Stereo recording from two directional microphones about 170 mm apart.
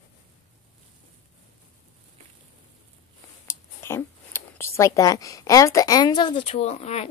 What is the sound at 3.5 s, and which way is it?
Speech, 15° left (ahead or behind).